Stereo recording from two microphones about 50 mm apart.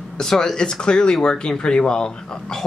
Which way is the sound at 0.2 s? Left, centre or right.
Centre.